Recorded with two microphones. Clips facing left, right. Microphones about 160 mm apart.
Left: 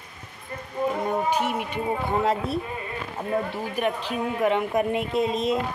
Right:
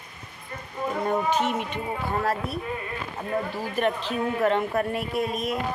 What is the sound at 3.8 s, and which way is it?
A woman's voice, 10° left (ahead or behind).